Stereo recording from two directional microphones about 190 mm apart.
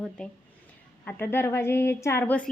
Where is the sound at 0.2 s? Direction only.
5° left (ahead or behind).